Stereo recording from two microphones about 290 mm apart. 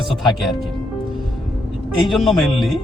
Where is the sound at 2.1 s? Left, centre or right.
Centre.